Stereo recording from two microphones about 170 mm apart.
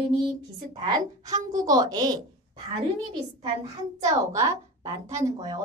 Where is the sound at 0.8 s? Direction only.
20° right (ahead or behind).